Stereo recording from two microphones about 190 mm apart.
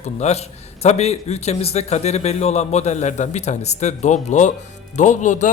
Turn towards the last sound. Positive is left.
turn(degrees=40)  # may be behind; listen again after turning